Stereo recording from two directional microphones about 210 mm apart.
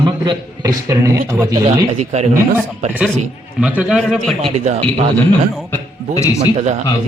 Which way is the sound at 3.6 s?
5° right (ahead or behind).